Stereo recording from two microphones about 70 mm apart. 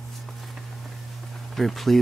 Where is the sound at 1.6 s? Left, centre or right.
Centre.